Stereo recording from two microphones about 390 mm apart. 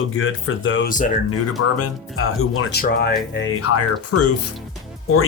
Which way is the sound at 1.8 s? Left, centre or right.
Left.